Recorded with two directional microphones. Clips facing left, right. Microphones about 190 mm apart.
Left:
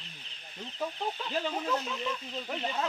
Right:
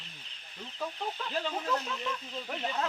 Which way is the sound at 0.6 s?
15° left (ahead or behind).